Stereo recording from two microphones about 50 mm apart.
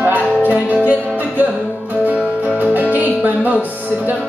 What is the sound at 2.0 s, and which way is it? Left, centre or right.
Music, right.